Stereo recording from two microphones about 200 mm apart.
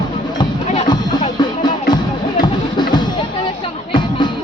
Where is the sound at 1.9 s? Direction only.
20° left (ahead or behind).